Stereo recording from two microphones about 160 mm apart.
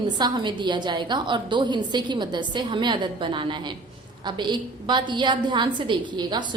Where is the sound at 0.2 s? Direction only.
25° right (ahead or behind).